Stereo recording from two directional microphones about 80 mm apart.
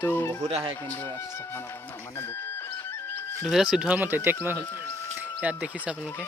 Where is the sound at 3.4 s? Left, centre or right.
Centre.